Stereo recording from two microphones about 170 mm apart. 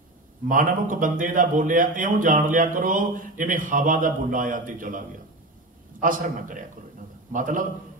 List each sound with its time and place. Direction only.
0.5 s a man's voice: 50° right (ahead or behind)